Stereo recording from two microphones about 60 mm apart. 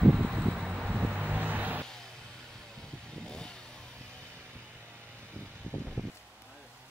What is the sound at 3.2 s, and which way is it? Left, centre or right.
Vehicle, centre.